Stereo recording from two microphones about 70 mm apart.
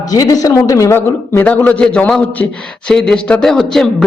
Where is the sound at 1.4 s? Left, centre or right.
Left.